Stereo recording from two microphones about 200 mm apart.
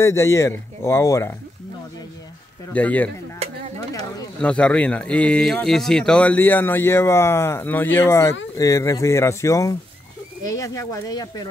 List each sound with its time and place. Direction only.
0.0 s speech: 15° left (ahead or behind)
2.7 s speech: 5° left (ahead or behind)
4.4 s speech: 5° left (ahead or behind)